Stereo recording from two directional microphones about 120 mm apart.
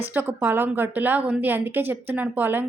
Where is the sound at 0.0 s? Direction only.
15° right (ahead or behind).